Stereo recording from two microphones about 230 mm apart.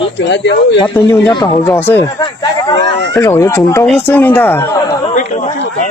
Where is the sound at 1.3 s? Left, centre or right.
Centre.